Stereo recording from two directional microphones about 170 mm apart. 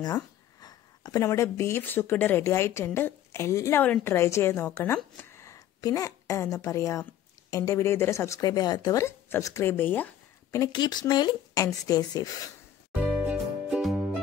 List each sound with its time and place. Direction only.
0.0 s speech: 25° left (ahead or behind)
13.2 s music: 5° right (ahead or behind)